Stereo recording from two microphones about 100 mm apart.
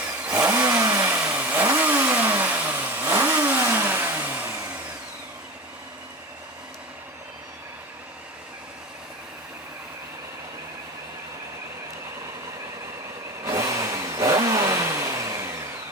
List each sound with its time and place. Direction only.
0.0 s vehicle: 15° right (ahead or behind)
13.4 s vehicle: 35° right (ahead or behind)